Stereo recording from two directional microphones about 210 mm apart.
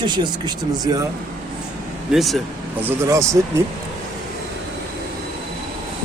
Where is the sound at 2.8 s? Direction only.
15° right (ahead or behind).